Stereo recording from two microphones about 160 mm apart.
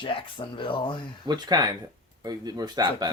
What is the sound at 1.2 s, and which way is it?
Speech, 25° right (ahead or behind).